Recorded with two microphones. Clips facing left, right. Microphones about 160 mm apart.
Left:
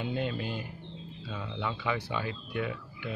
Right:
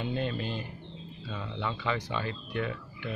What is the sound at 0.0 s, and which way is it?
Speech, 10° left (ahead or behind).